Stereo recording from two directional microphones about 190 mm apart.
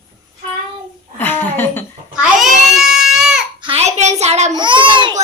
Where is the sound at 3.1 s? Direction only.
Centre (ahead or behind).